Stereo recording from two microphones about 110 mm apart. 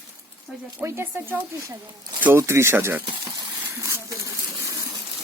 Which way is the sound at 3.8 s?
30° right (ahead or behind).